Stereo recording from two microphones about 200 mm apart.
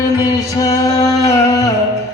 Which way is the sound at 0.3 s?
20° left (ahead or behind).